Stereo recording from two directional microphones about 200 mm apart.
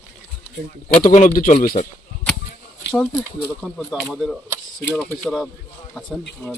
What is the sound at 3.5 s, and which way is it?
Speech, centre (ahead or behind).